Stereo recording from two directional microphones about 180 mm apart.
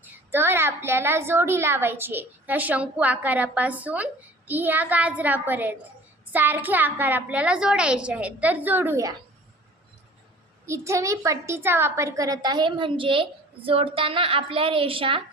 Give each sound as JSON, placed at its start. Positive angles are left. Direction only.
{"t": 0.0, "sound": "a woman's voice", "side_deg": -10}
{"t": 10.7, "sound": "a child's voice", "side_deg": -15}